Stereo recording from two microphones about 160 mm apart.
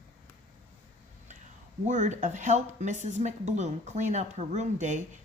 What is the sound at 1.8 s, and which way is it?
Speech, 45° right (ahead or behind).